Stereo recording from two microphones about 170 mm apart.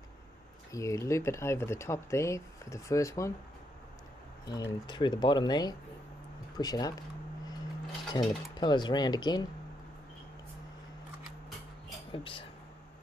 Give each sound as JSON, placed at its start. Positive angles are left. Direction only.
{"t": 0.7, "sound": "speech", "side_deg": 20}
{"t": 4.5, "sound": "speech", "side_deg": 20}
{"t": 8.1, "sound": "speech", "side_deg": 25}
{"t": 12.1, "sound": "speech", "side_deg": 30}